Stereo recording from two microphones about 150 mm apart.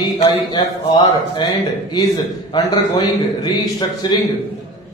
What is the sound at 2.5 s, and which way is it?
A man's voice, 30° left (ahead or behind).